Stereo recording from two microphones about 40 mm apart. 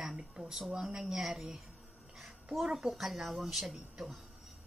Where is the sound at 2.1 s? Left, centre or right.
Centre.